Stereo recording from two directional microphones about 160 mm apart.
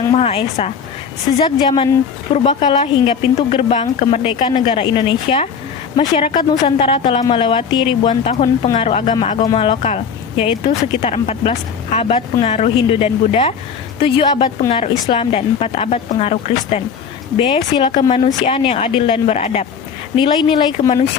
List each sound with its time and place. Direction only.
0.1 s a woman's voice: 40° left (ahead or behind)
9.5 s a woman's voice: 30° left (ahead or behind)
18.3 s a woman's voice: 45° left (ahead or behind)
20.1 s speech: 30° left (ahead or behind)
20.7 s speech: 45° left (ahead or behind)